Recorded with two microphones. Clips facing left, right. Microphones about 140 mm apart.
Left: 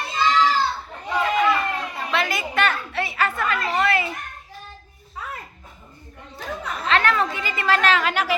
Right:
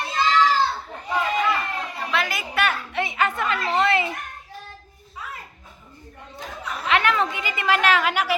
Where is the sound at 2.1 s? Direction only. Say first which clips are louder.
Left 2 dB; centre (ahead or behind); by 3.5 s 20° right (ahead or behind).